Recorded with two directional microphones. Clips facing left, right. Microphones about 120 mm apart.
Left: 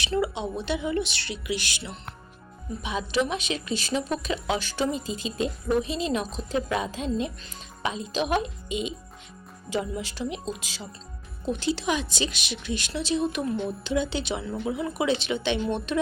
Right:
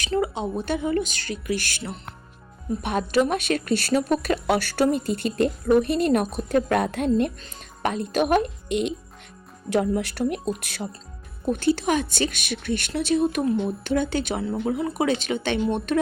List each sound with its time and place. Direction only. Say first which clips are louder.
0.0 s a woman's voice: right 2 dB; 45° right (ahead or behind)